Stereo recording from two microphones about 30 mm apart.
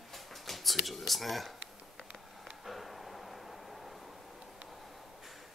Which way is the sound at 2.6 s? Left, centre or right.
Centre.